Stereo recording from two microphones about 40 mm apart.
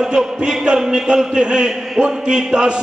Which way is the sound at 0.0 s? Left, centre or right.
Centre.